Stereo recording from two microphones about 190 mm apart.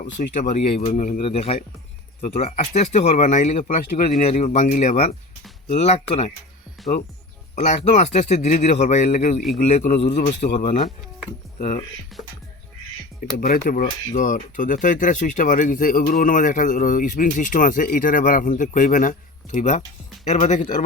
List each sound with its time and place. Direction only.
0.2 s speech: 45° left (ahead or behind)
7.5 s speech: 40° left (ahead or behind)
12.1 s speech: centre (ahead or behind)
13.3 s speech: 50° left (ahead or behind)